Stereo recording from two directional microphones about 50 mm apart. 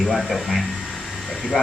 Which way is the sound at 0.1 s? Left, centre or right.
Centre.